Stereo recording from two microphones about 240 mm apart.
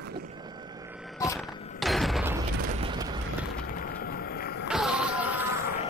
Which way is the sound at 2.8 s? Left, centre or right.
Centre.